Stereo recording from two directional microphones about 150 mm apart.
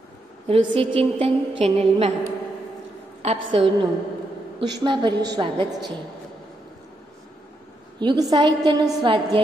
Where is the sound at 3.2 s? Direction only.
40° right (ahead or behind).